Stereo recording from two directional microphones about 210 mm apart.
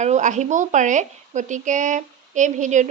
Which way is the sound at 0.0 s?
35° right (ahead or behind).